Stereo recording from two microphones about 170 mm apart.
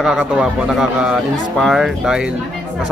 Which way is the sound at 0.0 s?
Centre (ahead or behind).